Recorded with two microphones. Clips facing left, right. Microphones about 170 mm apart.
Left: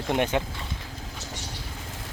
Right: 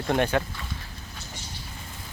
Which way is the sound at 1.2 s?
80° left.